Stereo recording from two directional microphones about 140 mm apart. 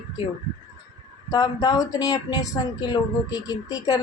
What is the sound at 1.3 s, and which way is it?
Speech, 25° left (ahead or behind).